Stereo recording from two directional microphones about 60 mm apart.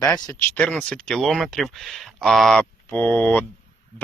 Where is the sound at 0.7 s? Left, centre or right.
Centre.